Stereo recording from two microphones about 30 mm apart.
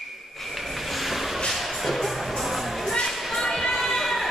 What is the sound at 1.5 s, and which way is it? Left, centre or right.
Music, centre.